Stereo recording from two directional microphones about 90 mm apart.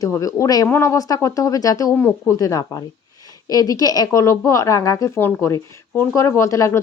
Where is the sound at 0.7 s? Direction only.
30° left (ahead or behind).